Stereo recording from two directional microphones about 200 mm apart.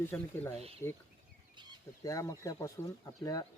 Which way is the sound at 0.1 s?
5° left (ahead or behind).